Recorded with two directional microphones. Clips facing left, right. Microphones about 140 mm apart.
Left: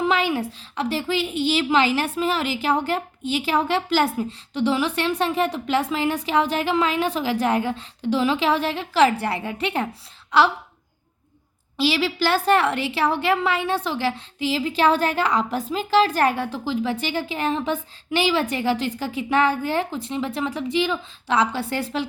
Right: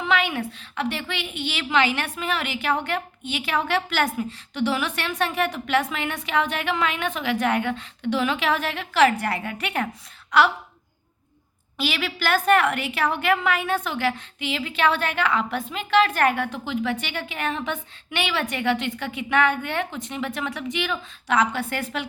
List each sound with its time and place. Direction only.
0.0 s a woman's voice: 35° left (ahead or behind)
11.8 s a woman's voice: 30° left (ahead or behind)